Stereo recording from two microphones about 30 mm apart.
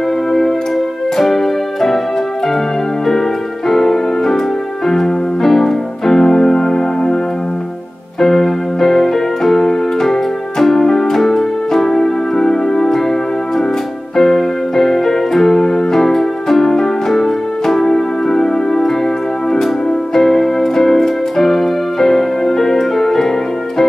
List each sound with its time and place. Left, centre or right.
1.1 s music: centre
3.6 s music: centre
4.8 s keyboard: centre
8.2 s keyboard: centre
10.6 s music: centre
14.1 s keyboard: centre
17.8 s music: centre
20.2 s music: centre